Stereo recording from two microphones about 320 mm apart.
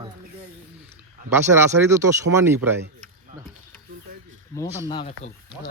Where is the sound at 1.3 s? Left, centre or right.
Centre.